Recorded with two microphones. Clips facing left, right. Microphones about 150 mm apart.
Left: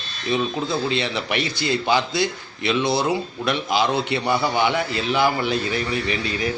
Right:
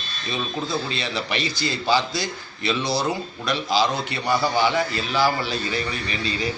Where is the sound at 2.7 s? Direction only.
20° left (ahead or behind).